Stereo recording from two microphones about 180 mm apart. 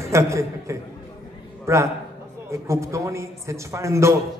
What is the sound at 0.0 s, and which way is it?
Speech, 15° right (ahead or behind).